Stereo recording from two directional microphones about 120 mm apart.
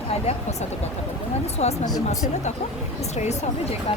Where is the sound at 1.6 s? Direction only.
60° left (ahead or behind).